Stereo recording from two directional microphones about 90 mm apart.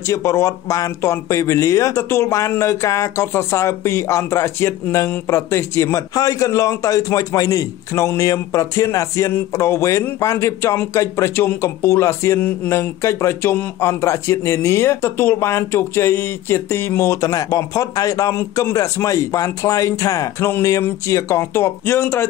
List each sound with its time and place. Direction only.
0.1 s a man's voice: 35° left (ahead or behind)